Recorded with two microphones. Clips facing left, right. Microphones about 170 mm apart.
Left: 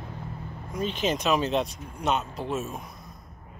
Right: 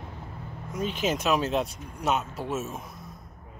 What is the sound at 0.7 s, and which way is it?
Speech, 10° right (ahead or behind).